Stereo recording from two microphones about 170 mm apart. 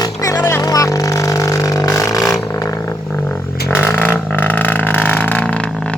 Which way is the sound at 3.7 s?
10° left (ahead or behind).